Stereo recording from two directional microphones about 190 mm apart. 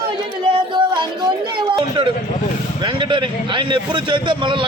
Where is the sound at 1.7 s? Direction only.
20° right (ahead or behind).